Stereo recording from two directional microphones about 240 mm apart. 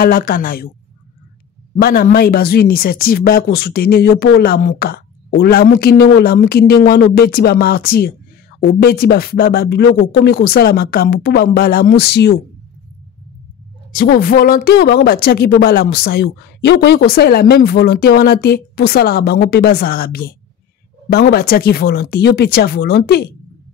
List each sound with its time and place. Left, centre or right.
0.0 s speech: left
1.8 s speech: left
13.9 s speech: left